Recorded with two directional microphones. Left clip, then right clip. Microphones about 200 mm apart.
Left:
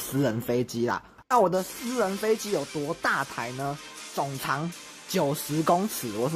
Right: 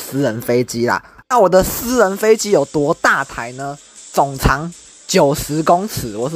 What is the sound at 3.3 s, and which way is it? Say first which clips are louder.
Speech: right 7 dB; 20° right (ahead or behind).